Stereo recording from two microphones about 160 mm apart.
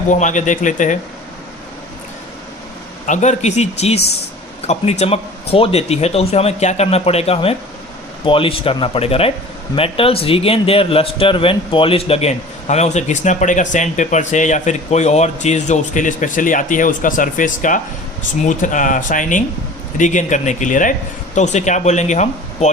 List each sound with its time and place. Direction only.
0.1 s speech: 50° left (ahead or behind)
3.1 s speech: 45° left (ahead or behind)